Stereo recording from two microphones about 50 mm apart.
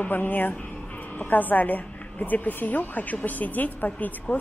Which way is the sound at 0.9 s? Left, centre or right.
Left.